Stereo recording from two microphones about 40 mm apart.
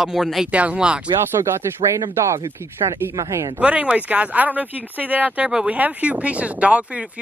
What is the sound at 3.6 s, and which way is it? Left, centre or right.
Speech, right.